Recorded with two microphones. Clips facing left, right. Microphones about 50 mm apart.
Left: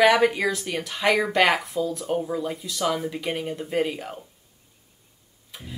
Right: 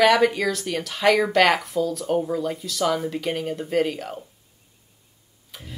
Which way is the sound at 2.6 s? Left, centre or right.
Centre.